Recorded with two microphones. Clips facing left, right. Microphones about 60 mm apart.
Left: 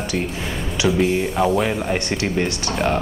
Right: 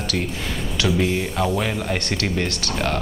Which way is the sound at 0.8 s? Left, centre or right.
Centre.